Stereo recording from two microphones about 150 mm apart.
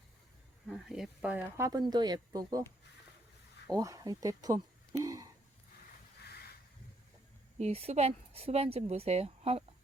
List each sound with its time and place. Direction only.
0.7 s speech: centre (ahead or behind)
1.5 s speech: 25° right (ahead or behind)
3.7 s speech: 20° right (ahead or behind)
7.6 s speech: 45° right (ahead or behind)